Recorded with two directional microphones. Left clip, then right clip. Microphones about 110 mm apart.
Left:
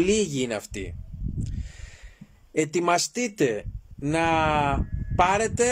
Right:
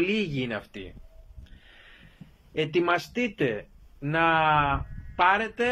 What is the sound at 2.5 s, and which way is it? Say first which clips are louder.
Speech: left 2 dB; 50° left (ahead or behind).